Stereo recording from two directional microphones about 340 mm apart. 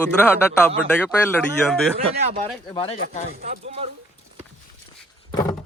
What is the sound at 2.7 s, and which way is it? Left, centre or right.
Speech, centre.